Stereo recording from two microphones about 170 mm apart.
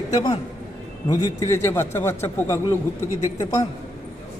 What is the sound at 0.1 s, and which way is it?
A man's voice, 20° left (ahead or behind).